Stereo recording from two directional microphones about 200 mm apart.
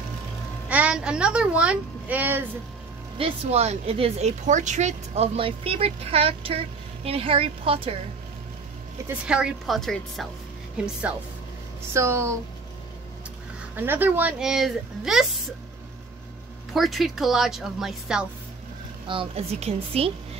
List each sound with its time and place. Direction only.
0.7 s speech: 5° right (ahead or behind)
3.2 s a woman's voice: 30° right (ahead or behind)
9.3 s speech: centre (ahead or behind)
11.9 s speech: 15° right (ahead or behind)
13.7 s speech: 10° right (ahead or behind)
16.7 s speech: centre (ahead or behind)
19.0 s a woman's voice: 30° right (ahead or behind)